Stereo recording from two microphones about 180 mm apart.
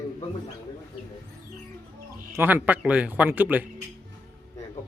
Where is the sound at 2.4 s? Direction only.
10° right (ahead or behind).